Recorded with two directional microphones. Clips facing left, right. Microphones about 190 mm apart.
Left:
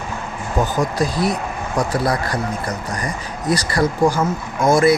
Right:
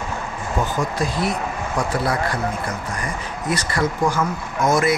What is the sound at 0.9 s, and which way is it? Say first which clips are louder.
Speech: left 3 dB; 35° left (ahead or behind).